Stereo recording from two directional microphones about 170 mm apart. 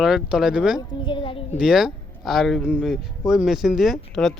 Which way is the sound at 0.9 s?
30° left (ahead or behind).